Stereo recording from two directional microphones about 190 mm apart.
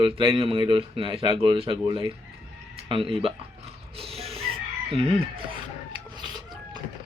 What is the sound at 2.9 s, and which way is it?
Chicken, 30° right (ahead or behind).